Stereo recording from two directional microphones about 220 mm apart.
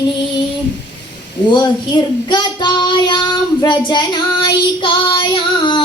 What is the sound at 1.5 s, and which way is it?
Child singing, 20° left (ahead or behind).